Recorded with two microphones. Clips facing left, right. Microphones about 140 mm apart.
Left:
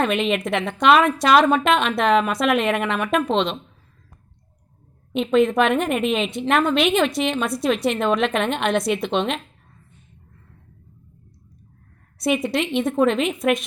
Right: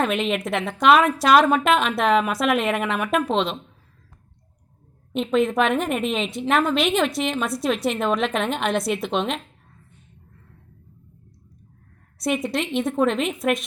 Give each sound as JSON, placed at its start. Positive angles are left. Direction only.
{"t": 0.0, "sound": "a woman's voice", "side_deg": 0}
{"t": 5.1, "sound": "a woman's voice", "side_deg": 0}
{"t": 12.2, "sound": "a woman's voice", "side_deg": 0}